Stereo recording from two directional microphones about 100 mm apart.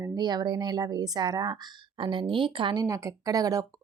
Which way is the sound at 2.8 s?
35° right (ahead or behind).